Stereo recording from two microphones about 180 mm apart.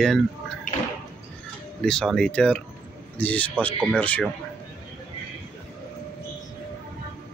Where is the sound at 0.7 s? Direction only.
50° left (ahead or behind).